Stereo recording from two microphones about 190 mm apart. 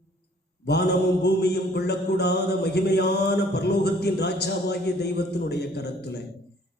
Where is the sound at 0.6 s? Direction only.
60° left (ahead or behind).